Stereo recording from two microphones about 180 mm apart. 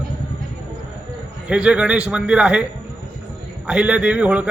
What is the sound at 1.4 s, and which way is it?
Speech, 5° right (ahead or behind).